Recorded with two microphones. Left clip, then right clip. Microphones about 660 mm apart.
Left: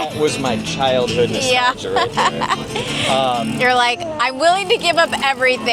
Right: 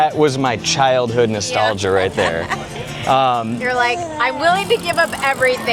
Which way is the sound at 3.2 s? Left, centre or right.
Right.